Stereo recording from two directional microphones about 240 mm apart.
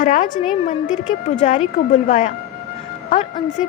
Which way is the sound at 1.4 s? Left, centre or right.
Left.